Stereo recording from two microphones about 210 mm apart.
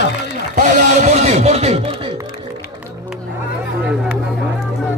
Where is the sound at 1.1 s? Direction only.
30° right (ahead or behind).